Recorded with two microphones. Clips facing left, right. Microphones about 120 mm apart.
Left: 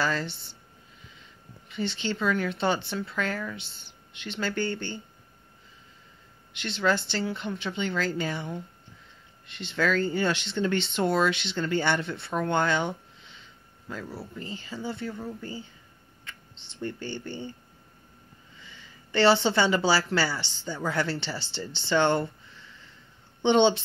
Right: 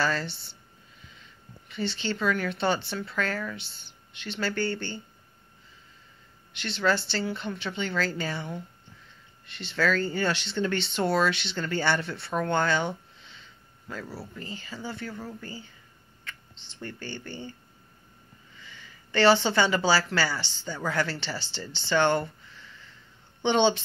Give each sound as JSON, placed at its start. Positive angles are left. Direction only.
{"t": 0.0, "sound": "a woman's voice", "side_deg": 15}
{"t": 1.7, "sound": "a woman's voice", "side_deg": 20}
{"t": 6.5, "sound": "a woman's voice", "side_deg": 20}
{"t": 14.3, "sound": "speech", "side_deg": 20}
{"t": 16.3, "sound": "a sound", "side_deg": 20}
{"t": 18.6, "sound": "speech", "side_deg": 20}
{"t": 23.4, "sound": "speech", "side_deg": 20}